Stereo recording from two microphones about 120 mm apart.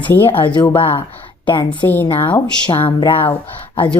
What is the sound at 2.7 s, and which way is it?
Speech, 40° left (ahead or behind).